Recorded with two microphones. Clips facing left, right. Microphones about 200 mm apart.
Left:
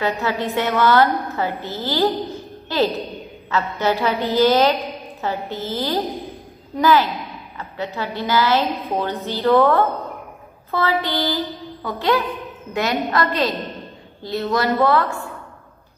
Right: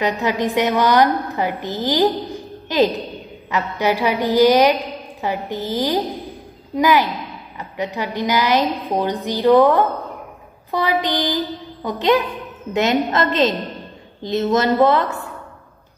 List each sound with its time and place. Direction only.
0.0 s a woman's voice: 15° right (ahead or behind)